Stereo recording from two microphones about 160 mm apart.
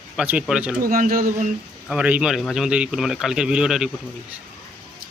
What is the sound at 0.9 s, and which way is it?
Speech, 65° right (ahead or behind).